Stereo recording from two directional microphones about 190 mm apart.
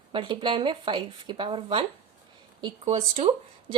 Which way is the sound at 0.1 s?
25° right (ahead or behind).